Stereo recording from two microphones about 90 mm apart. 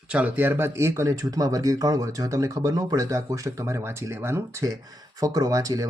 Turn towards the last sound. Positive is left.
turn(degrees=-40)  # may be behind; listen again after turning